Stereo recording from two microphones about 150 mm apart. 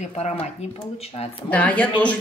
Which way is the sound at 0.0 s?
45° left (ahead or behind).